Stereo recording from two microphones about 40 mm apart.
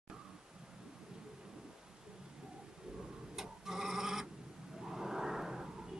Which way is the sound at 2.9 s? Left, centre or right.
Centre.